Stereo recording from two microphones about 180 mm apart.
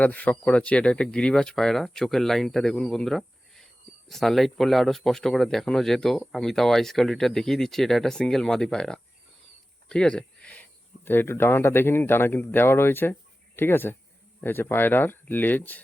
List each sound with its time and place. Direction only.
0.0 s speech: 10° left (ahead or behind)